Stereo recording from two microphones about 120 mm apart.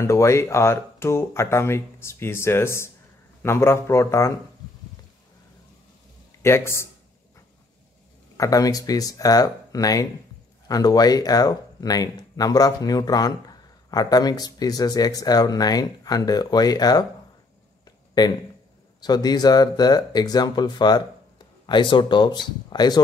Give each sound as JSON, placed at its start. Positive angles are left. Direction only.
{"t": 0.0, "sound": "speech", "side_deg": 25}
{"t": 6.4, "sound": "speech", "side_deg": 20}
{"t": 8.4, "sound": "speech", "side_deg": 30}
{"t": 18.9, "sound": "speech", "side_deg": 35}